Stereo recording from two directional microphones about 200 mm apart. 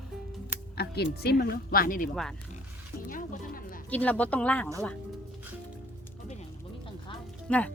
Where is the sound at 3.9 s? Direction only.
5° left (ahead or behind).